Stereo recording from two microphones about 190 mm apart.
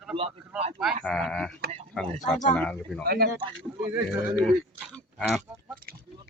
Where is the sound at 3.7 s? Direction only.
10° right (ahead or behind).